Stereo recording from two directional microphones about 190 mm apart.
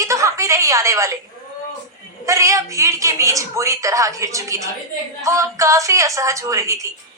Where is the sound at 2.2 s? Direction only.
15° right (ahead or behind).